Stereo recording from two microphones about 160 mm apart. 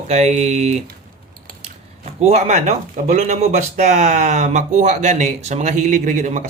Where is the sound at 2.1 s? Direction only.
45° right (ahead or behind).